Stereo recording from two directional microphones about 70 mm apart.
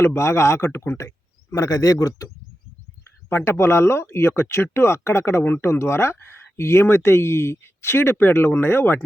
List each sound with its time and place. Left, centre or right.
0.0 s speech: left
3.2 s speech: left
5.4 s speech: left